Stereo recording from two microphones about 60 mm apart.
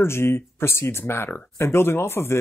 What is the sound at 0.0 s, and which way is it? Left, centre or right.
Speech, left.